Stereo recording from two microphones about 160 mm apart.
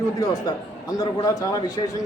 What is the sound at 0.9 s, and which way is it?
Speech, 25° left (ahead or behind).